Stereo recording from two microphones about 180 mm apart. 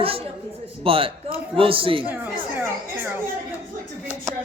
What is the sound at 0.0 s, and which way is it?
A man's voice, 30° right (ahead or behind).